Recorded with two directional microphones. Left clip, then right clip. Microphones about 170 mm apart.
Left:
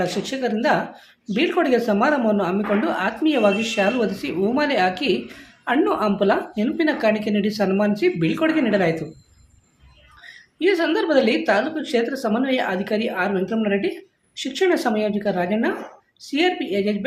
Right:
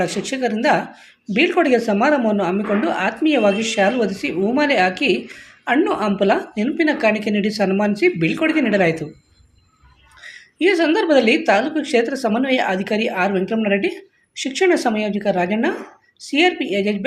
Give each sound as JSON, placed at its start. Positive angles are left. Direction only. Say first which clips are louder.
{"t": 0.0, "sound": "speech", "louder": "right 3 dB", "side_deg": -15}
{"t": 10.2, "sound": "a woman's voice", "louder": "right 4 dB", "side_deg": -25}